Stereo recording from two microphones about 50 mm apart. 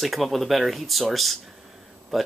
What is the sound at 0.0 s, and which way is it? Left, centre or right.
Speech, centre.